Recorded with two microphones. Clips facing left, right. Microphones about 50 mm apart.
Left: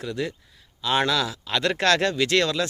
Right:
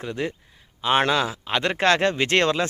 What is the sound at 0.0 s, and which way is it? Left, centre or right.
Speech, right.